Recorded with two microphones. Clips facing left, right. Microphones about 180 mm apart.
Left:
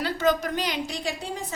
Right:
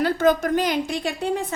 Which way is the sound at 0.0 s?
50° right (ahead or behind).